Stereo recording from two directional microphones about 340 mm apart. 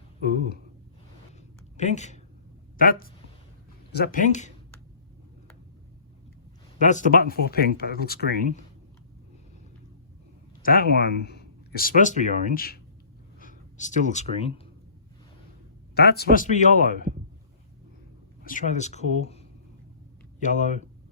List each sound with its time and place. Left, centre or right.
0.2 s a sound: left
1.7 s speech: centre
6.8 s speech: left
10.6 s speech: left
16.0 s speech: left
18.4 s speech: left